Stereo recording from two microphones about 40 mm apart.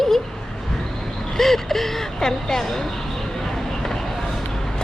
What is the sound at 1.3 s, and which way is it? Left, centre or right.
Speech, centre.